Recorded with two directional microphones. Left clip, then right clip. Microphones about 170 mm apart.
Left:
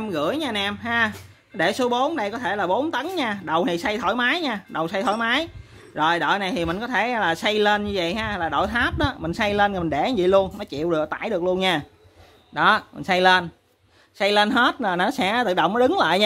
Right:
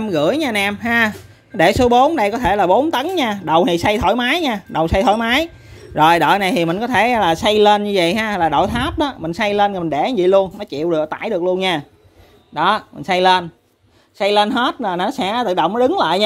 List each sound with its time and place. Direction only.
0.0 s speech: 25° right (ahead or behind)
8.5 s a woman's voice: 15° right (ahead or behind)